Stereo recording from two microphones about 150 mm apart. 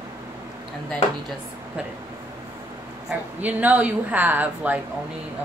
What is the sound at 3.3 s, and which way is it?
Speech, 10° right (ahead or behind).